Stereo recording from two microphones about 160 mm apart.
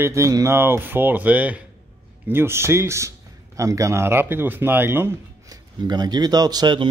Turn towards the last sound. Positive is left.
turn(degrees=-25)  # may be behind; listen again after turning